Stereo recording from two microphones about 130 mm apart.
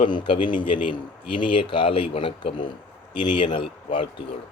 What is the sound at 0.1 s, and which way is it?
Speech, 40° left (ahead or behind).